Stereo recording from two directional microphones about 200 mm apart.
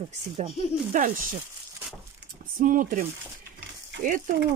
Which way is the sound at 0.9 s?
45° right (ahead or behind).